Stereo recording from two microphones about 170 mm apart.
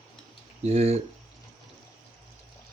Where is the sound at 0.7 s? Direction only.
40° right (ahead or behind).